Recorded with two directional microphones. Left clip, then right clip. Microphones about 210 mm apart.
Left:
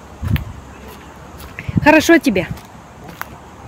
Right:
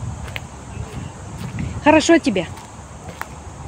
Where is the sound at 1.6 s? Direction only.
25° left (ahead or behind).